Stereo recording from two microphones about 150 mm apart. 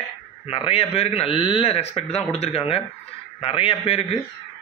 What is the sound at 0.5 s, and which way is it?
Speech, 40° left (ahead or behind).